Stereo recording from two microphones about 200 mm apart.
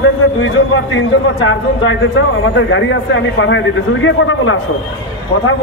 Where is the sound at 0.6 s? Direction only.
65° left (ahead or behind).